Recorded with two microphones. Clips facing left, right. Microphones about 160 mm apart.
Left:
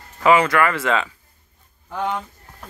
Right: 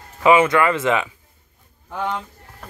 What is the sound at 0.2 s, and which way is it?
Speech, 20° right (ahead or behind).